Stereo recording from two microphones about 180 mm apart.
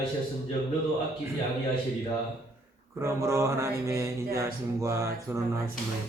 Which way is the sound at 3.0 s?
15° right (ahead or behind).